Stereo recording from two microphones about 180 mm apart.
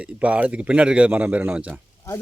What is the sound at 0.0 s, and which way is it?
A man's voice, 5° right (ahead or behind).